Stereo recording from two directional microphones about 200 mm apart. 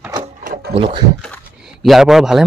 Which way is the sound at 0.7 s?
25° right (ahead or behind).